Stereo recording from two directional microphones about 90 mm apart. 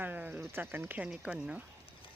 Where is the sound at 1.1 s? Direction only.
10° right (ahead or behind).